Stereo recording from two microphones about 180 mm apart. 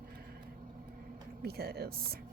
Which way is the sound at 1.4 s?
60° right (ahead or behind).